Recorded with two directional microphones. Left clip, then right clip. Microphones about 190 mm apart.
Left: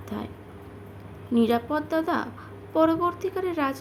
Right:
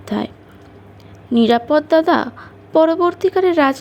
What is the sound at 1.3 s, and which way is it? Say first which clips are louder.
A woman's voice: right 10 dB; 30° right (ahead or behind).